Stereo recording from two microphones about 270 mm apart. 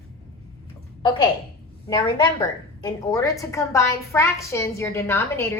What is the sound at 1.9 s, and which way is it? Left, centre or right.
A woman's voice, centre.